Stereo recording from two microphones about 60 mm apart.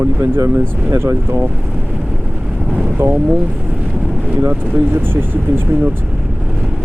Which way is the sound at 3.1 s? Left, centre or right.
Right.